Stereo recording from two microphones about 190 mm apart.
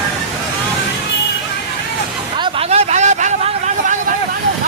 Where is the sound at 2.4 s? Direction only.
35° right (ahead or behind).